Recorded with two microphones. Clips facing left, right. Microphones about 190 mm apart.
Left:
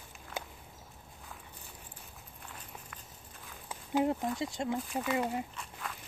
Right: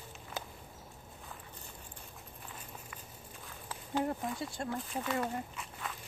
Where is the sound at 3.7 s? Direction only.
15° left (ahead or behind).